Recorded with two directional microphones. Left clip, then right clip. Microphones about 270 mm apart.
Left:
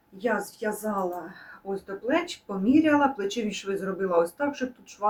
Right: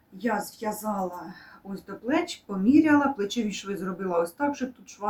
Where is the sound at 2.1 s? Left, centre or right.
Centre.